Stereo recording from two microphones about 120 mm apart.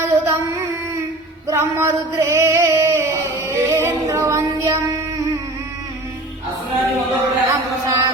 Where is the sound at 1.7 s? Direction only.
20° right (ahead or behind).